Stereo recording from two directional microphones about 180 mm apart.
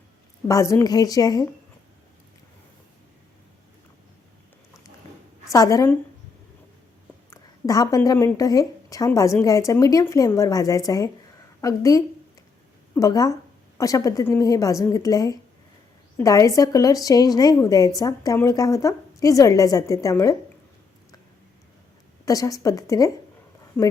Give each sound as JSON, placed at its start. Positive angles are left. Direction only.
{"t": 0.4, "sound": "a woman's voice", "side_deg": 15}
{"t": 5.5, "sound": "a woman's voice", "side_deg": 20}
{"t": 7.3, "sound": "a woman's voice", "side_deg": 20}
{"t": 22.3, "sound": "a woman's voice", "side_deg": 20}